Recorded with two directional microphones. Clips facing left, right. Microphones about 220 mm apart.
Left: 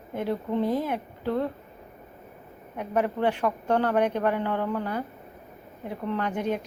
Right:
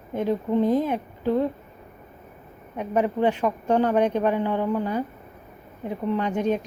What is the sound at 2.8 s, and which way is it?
Speech, 20° right (ahead or behind).